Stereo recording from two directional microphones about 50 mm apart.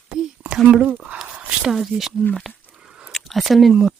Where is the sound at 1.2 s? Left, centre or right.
Right.